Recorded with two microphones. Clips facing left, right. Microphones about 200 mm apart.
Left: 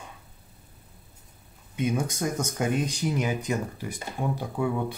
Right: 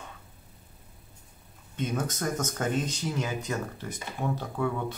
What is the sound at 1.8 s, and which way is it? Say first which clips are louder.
Speech: left 4 dB; 10° left (ahead or behind).